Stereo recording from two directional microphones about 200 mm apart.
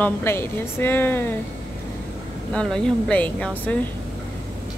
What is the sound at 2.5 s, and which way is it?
Speech, 5° left (ahead or behind).